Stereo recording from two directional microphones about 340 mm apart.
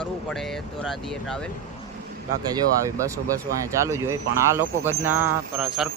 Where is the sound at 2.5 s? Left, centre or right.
Centre.